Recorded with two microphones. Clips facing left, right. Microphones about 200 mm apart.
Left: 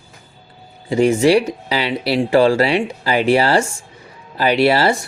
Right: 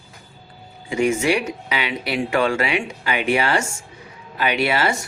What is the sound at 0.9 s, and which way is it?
Speech, 35° left (ahead or behind).